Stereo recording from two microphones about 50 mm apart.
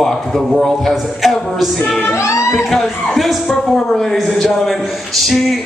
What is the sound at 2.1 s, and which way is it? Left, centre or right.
Music, left.